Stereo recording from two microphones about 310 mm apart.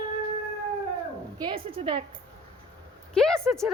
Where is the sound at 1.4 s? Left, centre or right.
Centre.